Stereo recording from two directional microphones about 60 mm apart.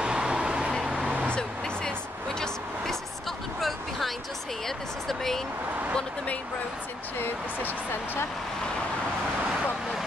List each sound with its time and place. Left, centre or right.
0.0 s vehicle: centre
1.2 s vehicle: centre
4.6 s a sound: centre
7.2 s speech: left